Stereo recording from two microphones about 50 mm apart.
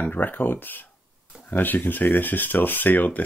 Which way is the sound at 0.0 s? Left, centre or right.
Left.